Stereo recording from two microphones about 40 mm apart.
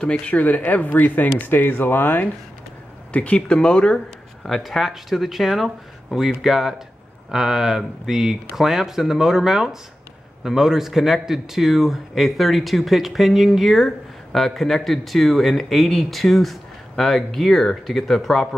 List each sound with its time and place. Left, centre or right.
0.0 s speech: left
0.4 s speech: left
3.1 s speech: left
4.5 s speech: centre